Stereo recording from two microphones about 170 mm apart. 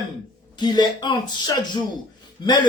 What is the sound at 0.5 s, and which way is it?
Speech, 25° left (ahead or behind).